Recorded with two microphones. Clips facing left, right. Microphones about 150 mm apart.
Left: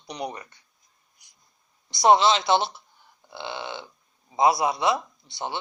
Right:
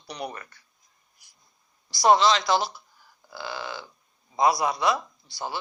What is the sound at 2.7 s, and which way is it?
Burping, 25° left (ahead or behind).